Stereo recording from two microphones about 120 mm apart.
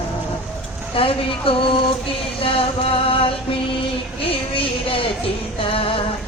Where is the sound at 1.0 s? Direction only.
50° left (ahead or behind).